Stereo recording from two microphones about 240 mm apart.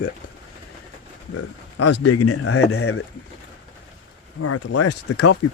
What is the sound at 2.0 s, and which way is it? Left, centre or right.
Speech, left.